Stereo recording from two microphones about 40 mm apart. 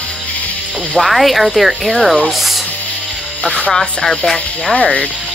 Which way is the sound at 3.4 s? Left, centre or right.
Left.